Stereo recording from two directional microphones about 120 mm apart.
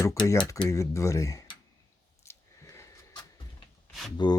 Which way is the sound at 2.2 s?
25° left (ahead or behind).